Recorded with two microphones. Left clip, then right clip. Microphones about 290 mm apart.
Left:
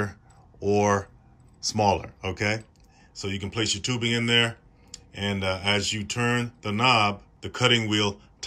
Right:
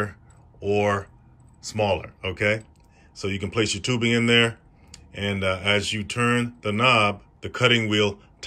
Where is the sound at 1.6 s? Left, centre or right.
Centre.